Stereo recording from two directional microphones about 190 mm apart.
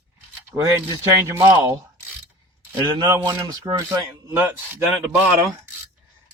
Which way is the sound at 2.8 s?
20° right (ahead or behind).